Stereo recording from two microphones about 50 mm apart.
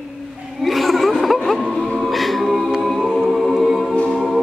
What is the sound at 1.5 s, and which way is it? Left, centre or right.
Music, centre.